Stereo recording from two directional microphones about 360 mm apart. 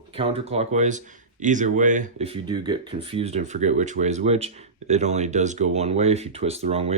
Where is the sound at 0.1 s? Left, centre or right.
Centre.